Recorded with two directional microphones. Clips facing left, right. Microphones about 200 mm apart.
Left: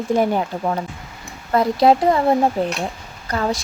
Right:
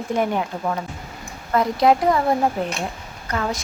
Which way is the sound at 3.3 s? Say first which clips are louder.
Left 3 dB; 35° left (ahead or behind).